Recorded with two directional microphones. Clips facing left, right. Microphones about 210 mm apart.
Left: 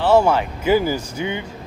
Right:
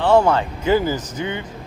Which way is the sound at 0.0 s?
5° left (ahead or behind).